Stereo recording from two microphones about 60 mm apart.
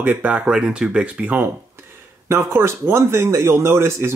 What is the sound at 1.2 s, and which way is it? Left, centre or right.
Speech, right.